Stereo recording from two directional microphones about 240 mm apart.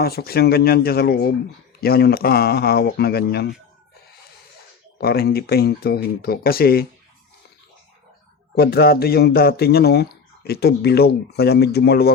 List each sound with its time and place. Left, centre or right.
0.0 s speech: left
4.9 s speech: left
8.5 s speech: left